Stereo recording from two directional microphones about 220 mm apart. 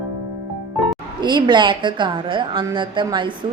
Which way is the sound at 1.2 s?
20° right (ahead or behind).